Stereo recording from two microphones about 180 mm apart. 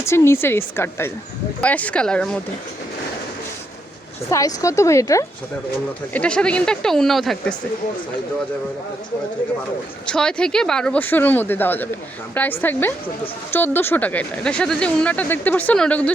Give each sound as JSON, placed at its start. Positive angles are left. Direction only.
{"t": 0.0, "sound": "a woman's voice", "side_deg": 15}
{"t": 4.3, "sound": "a woman's voice", "side_deg": 15}
{"t": 6.1, "sound": "speech", "side_deg": 5}
{"t": 10.1, "sound": "a woman's voice", "side_deg": 5}